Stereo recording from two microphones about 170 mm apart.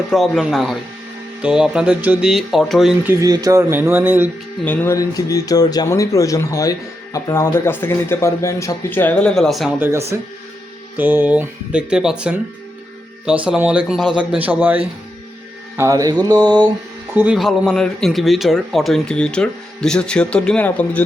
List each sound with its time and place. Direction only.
0.1 s speech: centre (ahead or behind)
3.1 s speech: 20° right (ahead or behind)
4.6 s speech: 10° left (ahead or behind)
9.7 s speech: 10° right (ahead or behind)
15.8 s mantra: 20° right (ahead or behind)
17.2 s speech: 5° right (ahead or behind)